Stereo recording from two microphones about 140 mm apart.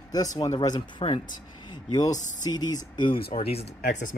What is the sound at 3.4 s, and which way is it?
Speech, 45° left (ahead or behind).